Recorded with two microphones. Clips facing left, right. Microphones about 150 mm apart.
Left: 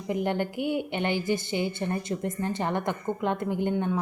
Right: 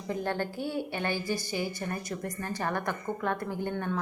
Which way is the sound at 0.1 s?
15° left (ahead or behind).